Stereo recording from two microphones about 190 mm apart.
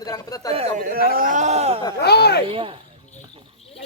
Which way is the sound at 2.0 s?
60° left (ahead or behind).